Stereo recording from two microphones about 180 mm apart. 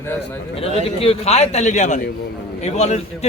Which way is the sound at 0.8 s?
30° left (ahead or behind).